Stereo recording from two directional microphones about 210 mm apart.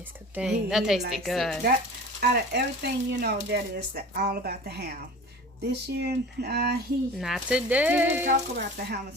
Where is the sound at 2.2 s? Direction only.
50° right (ahead or behind).